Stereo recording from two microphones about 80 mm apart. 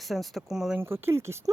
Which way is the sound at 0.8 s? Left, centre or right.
Right.